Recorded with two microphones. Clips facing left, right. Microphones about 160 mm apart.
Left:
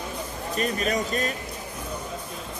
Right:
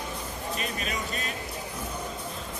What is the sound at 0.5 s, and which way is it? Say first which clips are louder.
Speech: left 10 dB; 45° left (ahead or behind).